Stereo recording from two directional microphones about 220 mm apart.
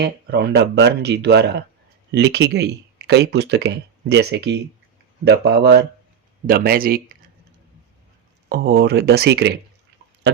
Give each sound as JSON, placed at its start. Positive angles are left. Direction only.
{"t": 0.0, "sound": "speech", "side_deg": -50}
{"t": 8.4, "sound": "speech", "side_deg": -45}